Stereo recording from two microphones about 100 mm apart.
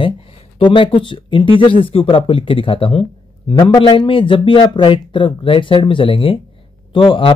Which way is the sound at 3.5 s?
50° left (ahead or behind).